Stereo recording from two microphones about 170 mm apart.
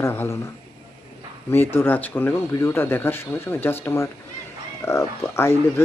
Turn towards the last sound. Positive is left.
turn(degrees=15)  # may be behind; listen again after turning